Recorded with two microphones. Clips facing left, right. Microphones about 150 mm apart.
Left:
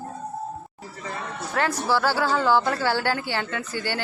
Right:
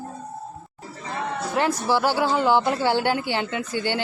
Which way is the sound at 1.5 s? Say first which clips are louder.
Right 1 dB; 15° right (ahead or behind).